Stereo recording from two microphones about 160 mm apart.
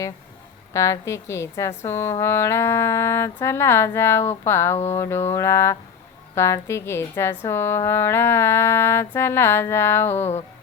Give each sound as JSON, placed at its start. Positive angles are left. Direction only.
{"t": 0.7, "sound": "a woman's voice", "side_deg": 20}